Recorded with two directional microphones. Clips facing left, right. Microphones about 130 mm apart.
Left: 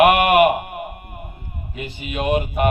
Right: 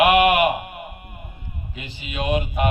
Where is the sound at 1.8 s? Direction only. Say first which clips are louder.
Left 4 dB; 50° left (ahead or behind).